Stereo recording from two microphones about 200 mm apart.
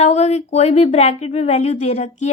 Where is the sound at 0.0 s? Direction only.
35° left (ahead or behind).